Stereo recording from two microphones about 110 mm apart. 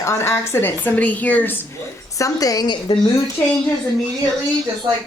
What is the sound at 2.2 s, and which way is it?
Speech, 35° left (ahead or behind).